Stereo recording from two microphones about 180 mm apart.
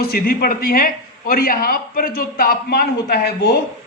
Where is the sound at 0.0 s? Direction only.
55° left (ahead or behind).